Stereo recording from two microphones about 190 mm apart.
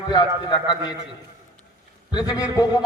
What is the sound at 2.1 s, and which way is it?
Speech, 20° left (ahead or behind).